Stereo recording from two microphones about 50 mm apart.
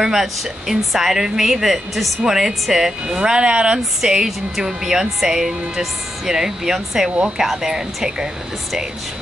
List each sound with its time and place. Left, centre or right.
0.0 s speech: centre
3.2 s speech: centre